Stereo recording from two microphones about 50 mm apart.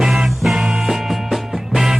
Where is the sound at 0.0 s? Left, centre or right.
Centre.